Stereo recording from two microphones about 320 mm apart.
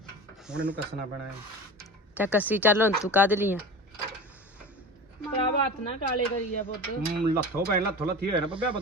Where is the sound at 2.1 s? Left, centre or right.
Centre.